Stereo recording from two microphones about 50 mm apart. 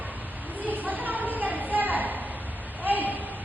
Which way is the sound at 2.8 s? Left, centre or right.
Right.